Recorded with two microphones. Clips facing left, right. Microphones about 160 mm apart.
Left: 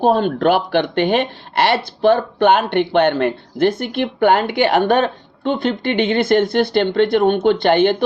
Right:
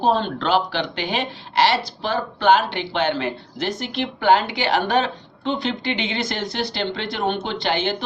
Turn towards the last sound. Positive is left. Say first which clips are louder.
# left 10 dB
turn(degrees=55)  # may be behind; listen again after turning